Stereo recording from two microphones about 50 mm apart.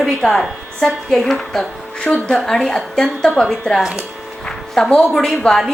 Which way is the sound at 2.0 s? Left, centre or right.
Left.